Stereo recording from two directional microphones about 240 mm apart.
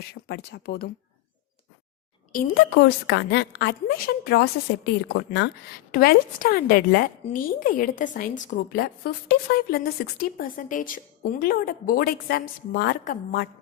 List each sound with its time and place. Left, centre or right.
0.1 s a woman's voice: left
2.3 s a woman's voice: left